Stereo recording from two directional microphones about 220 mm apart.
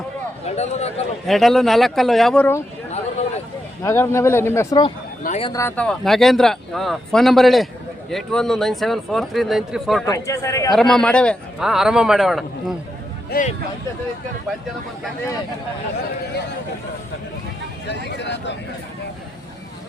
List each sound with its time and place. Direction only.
0.4 s speech: 30° left (ahead or behind)
1.3 s speech: centre (ahead or behind)
3.8 s speech: 10° left (ahead or behind)
5.2 s speech: 30° left (ahead or behind)
5.5 s speech: 15° left (ahead or behind)
10.1 s speech: 15° left (ahead or behind)
10.7 s speech: centre (ahead or behind)
13.3 s speech: 35° left (ahead or behind)
17.8 s speech: 50° left (ahead or behind)